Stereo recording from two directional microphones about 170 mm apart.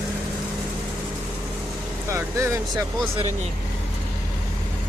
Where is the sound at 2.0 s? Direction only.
15° right (ahead or behind).